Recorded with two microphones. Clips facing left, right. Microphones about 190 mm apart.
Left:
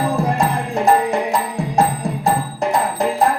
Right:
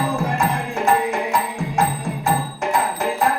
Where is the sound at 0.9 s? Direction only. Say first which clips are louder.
Left 3 dB; 35° left (ahead or behind).